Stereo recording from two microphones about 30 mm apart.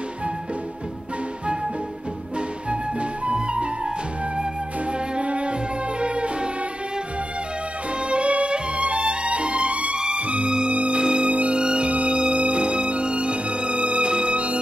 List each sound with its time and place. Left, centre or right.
2.3 s music: right
5.1 s music: right
8.1 s music: right
9.9 s music: right
10.2 s music: right
11.0 s music: right
11.2 s music: right
11.6 s music: right
14.3 s music: right